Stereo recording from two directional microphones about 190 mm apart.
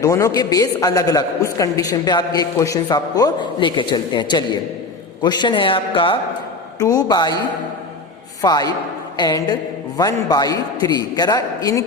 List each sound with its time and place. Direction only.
0.0 s a man's voice: 15° left (ahead or behind)
8.4 s a man's voice: 20° left (ahead or behind)